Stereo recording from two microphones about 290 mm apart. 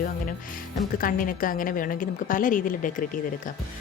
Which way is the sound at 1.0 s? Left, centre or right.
Left.